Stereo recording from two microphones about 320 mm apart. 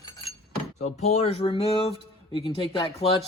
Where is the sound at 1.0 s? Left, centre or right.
Centre.